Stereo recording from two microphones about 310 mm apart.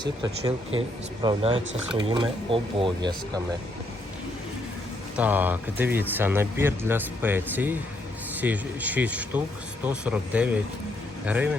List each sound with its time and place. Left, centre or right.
0.0 s speech: centre
5.1 s speech: centre